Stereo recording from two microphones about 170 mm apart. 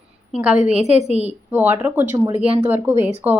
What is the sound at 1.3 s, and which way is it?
A woman's voice, 10° right (ahead or behind).